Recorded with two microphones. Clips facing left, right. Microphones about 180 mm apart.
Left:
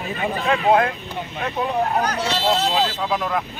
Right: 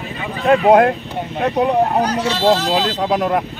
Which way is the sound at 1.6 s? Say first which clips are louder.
Right 5 dB; 75° right (ahead or behind).